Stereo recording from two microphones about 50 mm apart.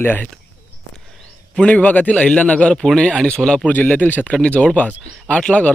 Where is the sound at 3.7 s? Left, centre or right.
Left.